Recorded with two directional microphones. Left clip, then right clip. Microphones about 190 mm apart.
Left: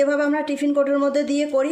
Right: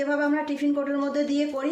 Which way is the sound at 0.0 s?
45° left (ahead or behind).